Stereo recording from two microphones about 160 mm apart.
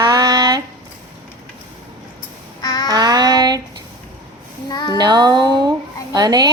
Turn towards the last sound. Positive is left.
turn(degrees=-25)  # may be behind; listen again after turning